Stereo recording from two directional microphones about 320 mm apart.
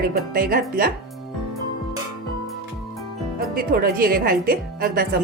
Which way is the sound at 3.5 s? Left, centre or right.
Right.